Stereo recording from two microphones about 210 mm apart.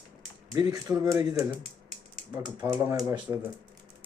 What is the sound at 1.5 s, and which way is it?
Typing, 25° right (ahead or behind).